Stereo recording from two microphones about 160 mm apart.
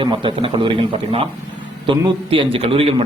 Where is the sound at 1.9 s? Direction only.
30° right (ahead or behind).